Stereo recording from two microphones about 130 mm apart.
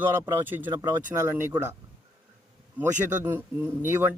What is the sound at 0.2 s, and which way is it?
A man's voice, 15° right (ahead or behind).